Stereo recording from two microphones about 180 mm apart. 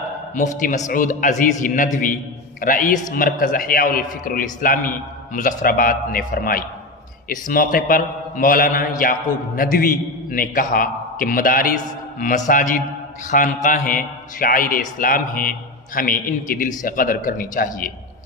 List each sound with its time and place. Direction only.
0.4 s a man's voice: 45° left (ahead or behind)